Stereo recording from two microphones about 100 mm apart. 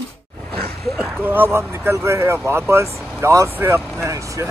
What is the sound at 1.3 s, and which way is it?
Speech, 20° right (ahead or behind).